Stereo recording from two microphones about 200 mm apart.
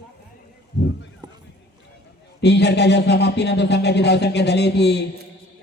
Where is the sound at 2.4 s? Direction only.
55° left (ahead or behind).